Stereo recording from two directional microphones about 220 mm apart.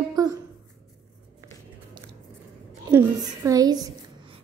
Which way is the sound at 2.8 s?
15° right (ahead or behind).